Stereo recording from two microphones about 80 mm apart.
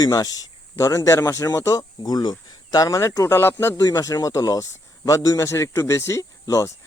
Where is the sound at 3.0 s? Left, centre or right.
Left.